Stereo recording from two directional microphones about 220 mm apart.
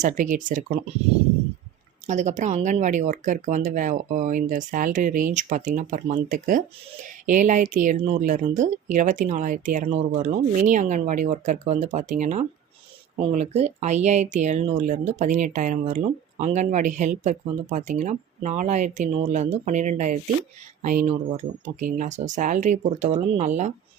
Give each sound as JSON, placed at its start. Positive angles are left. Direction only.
{"t": 0.0, "sound": "speech", "side_deg": -35}
{"t": 2.0, "sound": "speech", "side_deg": -30}